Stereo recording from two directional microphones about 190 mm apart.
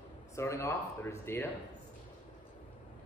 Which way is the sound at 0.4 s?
15° left (ahead or behind).